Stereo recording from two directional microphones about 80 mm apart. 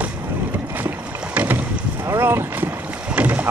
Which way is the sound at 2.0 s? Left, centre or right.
Right.